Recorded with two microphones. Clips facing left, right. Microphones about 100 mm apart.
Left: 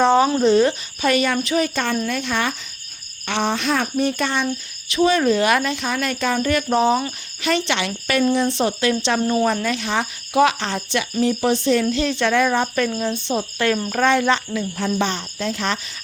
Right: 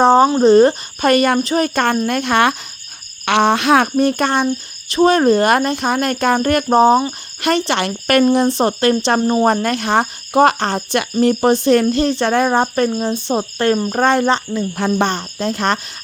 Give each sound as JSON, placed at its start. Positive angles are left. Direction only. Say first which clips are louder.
{"t": 0.0, "sound": "cricket", "louder": "right 5 dB", "side_deg": -35}
{"t": 2.0, "sound": "speech", "louder": "right 8 dB", "side_deg": -60}
{"t": 4.9, "sound": "cricket", "louder": "right 5 dB", "side_deg": -45}
{"t": 13.0, "sound": "speech", "louder": "right 4 dB", "side_deg": -40}
{"t": 14.8, "sound": "cricket", "louder": "right 5 dB", "side_deg": -55}